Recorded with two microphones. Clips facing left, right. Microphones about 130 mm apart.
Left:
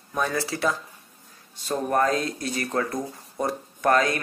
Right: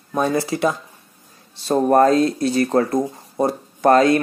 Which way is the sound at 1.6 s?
35° right (ahead or behind).